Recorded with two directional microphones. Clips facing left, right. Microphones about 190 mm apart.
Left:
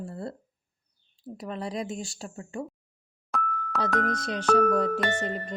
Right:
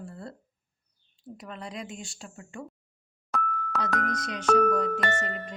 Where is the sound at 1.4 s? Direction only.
35° left (ahead or behind).